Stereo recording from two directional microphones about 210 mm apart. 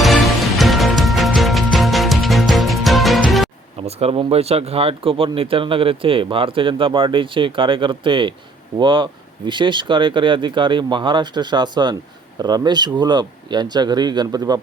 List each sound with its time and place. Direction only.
0.0 s music: centre (ahead or behind)
3.8 s speech: 30° right (ahead or behind)